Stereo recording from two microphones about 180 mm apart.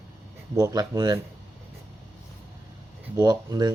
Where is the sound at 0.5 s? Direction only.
20° right (ahead or behind).